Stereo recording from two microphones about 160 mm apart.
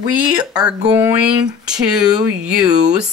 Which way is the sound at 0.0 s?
25° right (ahead or behind).